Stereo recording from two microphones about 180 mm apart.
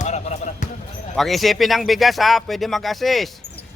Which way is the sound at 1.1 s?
Centre (ahead or behind).